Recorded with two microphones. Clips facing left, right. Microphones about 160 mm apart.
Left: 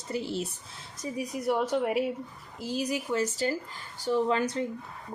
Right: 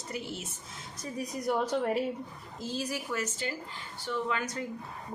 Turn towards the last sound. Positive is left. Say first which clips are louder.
# left 6 dB
turn(degrees=30)  # may be behind; listen again after turning